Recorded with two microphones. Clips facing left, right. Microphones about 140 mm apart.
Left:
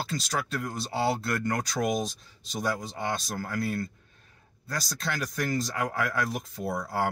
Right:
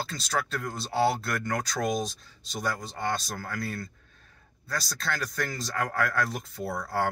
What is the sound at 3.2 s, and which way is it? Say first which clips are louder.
Speech: left 3 dB; 15° left (ahead or behind).